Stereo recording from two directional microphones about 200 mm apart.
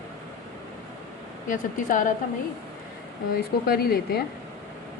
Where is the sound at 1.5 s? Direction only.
40° left (ahead or behind).